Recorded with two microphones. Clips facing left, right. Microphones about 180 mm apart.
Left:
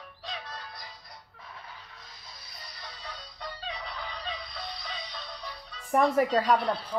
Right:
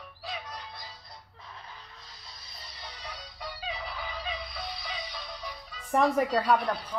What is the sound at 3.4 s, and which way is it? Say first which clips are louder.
Fowl: right 1 dB; 5° right (ahead or behind).